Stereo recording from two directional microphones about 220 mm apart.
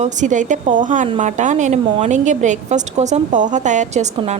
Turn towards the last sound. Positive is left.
turn(degrees=-30)  # may be behind; listen again after turning